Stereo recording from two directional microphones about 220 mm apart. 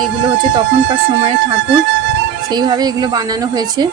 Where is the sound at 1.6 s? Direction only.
55° right (ahead or behind).